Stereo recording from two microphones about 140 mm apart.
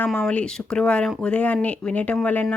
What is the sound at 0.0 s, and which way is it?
Speech, 5° left (ahead or behind).